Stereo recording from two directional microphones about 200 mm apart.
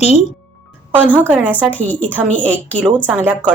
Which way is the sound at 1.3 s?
10° right (ahead or behind).